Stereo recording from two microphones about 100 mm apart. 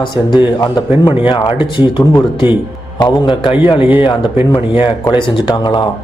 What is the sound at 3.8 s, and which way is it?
Speech, 15° right (ahead or behind).